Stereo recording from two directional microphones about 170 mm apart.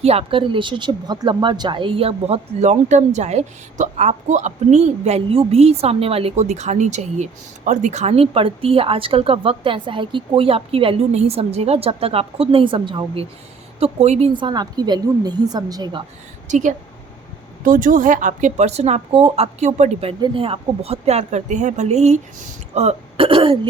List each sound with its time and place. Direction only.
0.0 s speech: 35° right (ahead or behind)
14.3 s a woman's voice: 25° right (ahead or behind)
16.5 s a woman's voice: 45° right (ahead or behind)